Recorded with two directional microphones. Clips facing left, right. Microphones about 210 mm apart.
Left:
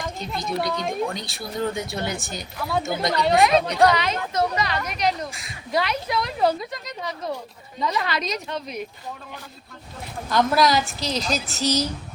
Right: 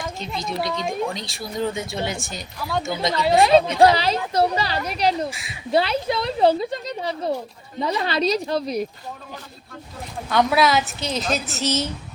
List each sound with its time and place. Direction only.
0.0 s a woman's voice: centre (ahead or behind)
3.3 s speech: 30° right (ahead or behind)
10.2 s a woman's voice: centre (ahead or behind)